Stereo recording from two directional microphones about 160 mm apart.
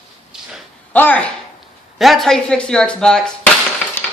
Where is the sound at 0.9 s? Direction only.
10° left (ahead or behind).